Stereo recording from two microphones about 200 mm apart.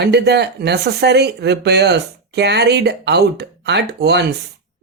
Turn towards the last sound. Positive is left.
turn(degrees=-55)  # may be behind; listen again after turning